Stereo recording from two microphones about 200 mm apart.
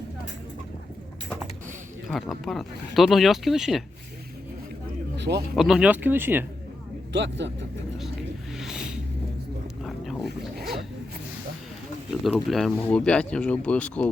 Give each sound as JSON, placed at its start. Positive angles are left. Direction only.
{"t": 2.0, "sound": "speech", "side_deg": 0}
{"t": 5.1, "sound": "a sound", "side_deg": -60}
{"t": 5.5, "sound": "speech", "side_deg": -5}
{"t": 7.1, "sound": "speech", "side_deg": -60}
{"t": 8.5, "sound": "a sound", "side_deg": 0}
{"t": 9.8, "sound": "dog", "side_deg": 0}
{"t": 12.2, "sound": "speech", "side_deg": 0}